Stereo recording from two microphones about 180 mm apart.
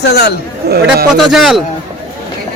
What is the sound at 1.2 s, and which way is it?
Speech, centre (ahead or behind).